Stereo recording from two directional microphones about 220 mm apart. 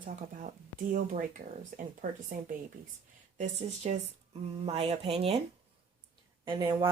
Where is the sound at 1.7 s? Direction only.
40° right (ahead or behind).